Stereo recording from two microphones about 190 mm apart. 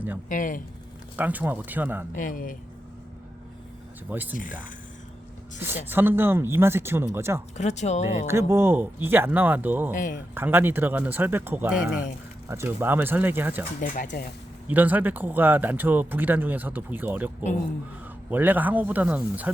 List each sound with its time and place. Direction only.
0.3 s speech: 45° left (ahead or behind)
1.1 s speech: 10° right (ahead or behind)
2.1 s speech: 45° left (ahead or behind)
4.1 s speech: 10° right (ahead or behind)
4.4 s speech: 45° left (ahead or behind)
5.5 s speech: 10° right (ahead or behind)
7.5 s speech: 35° left (ahead or behind)
8.3 s speech: 15° right (ahead or behind)
9.9 s speech: 45° left (ahead or behind)
10.3 s speech: 10° right (ahead or behind)
13.8 s speech: 40° left (ahead or behind)
14.7 s speech: 10° right (ahead or behind)